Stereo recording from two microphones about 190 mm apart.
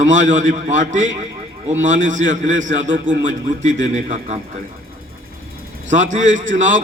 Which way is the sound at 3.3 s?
85° right.